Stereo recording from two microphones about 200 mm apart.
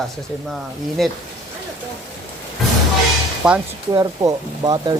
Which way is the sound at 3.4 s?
5° right (ahead or behind).